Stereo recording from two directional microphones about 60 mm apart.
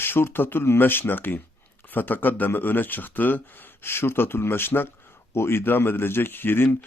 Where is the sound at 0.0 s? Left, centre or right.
Left.